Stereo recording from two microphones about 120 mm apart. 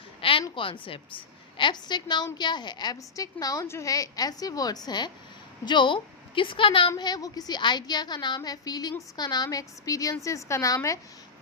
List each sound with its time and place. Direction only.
0.2 s a sound: 50° left (ahead or behind)
0.5 s a woman's voice: 50° left (ahead or behind)
6.9 s a woman's voice: 30° left (ahead or behind)